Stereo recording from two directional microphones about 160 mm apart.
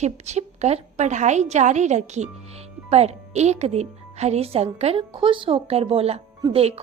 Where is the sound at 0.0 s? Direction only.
45° right (ahead or behind).